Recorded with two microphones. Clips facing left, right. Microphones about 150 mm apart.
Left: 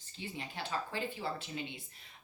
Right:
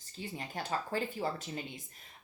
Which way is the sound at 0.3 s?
45° right (ahead or behind).